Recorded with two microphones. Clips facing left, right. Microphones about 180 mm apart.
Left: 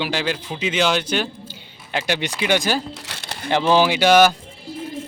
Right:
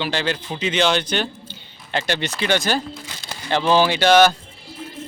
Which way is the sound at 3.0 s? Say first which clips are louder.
Left 1 dB; 75° left (ahead or behind).